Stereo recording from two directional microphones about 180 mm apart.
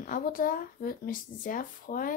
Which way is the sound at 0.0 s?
50° left (ahead or behind).